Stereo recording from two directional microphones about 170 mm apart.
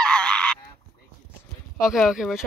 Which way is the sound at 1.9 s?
Centre (ahead or behind).